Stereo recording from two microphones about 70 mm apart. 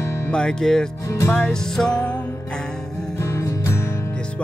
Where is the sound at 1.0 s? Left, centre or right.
Left.